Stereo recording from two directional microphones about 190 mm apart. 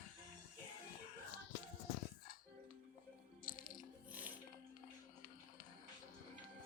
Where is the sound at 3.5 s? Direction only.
45° left (ahead or behind).